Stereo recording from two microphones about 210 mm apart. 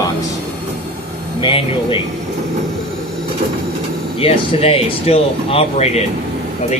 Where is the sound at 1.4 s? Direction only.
25° left (ahead or behind).